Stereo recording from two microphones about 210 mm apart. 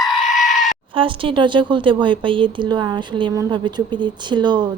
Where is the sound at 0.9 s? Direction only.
25° right (ahead or behind).